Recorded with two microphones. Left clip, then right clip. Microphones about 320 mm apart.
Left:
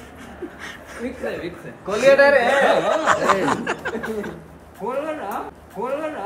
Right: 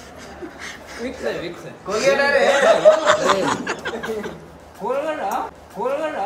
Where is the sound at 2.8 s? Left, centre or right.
Centre.